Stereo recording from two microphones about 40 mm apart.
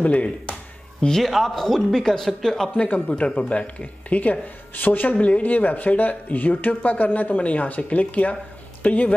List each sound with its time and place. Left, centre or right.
0.0 s speech: left
1.0 s speech: centre
2.7 s speech: left
3.1 s speech: left
5.1 s speech: left